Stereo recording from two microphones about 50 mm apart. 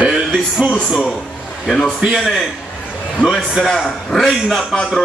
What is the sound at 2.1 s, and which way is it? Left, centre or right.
Speech, centre.